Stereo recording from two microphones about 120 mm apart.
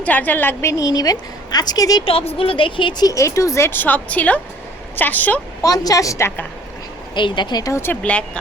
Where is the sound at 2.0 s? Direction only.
55° left (ahead or behind); by 5.4 s 15° left (ahead or behind).